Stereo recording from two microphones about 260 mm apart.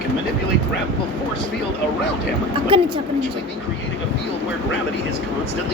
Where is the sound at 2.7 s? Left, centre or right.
Centre.